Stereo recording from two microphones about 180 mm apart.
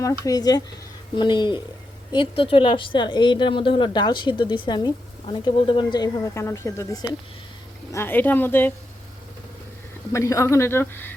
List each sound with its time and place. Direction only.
0.0 s a woman's voice: 20° left (ahead or behind)
10.1 s speech: 15° left (ahead or behind)